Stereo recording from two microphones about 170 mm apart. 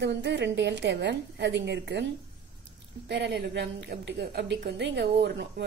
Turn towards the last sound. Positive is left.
turn(degrees=-85)